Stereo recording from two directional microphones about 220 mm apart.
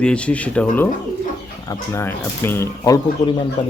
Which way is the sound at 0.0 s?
5° left (ahead or behind).